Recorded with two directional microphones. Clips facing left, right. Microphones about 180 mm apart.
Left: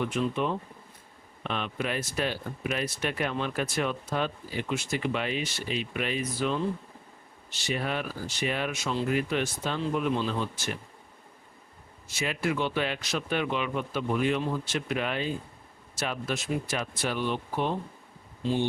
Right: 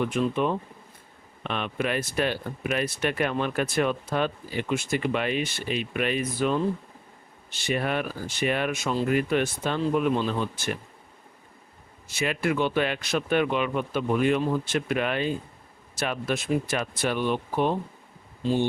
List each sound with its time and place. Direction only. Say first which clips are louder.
0.1 s speech: right 3 dB; 55° right (ahead or behind)
12.0 s speech: right 3 dB; 60° right (ahead or behind)